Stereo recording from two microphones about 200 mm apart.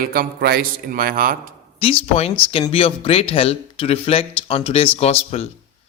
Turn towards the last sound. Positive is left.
turn(degrees=30)  # may be behind; listen again after turning